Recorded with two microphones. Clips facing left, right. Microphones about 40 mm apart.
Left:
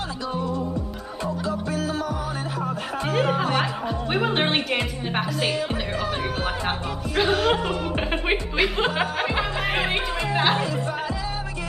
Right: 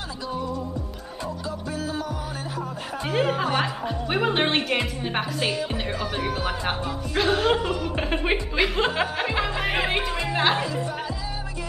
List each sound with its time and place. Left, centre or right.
1.7 s music: left
3.1 s speech: centre